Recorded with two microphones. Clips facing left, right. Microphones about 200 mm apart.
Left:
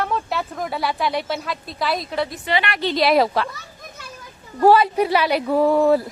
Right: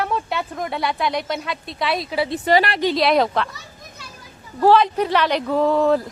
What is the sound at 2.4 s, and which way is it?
Speech, 40° right (ahead or behind).